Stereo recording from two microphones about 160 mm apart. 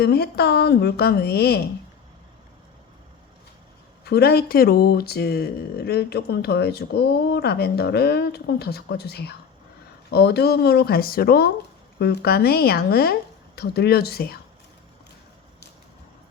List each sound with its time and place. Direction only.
0.0 s speech: 90° left
4.0 s speech: 90° left; by 11.5 s 70° left (ahead or behind)
11.9 s speech: 90° left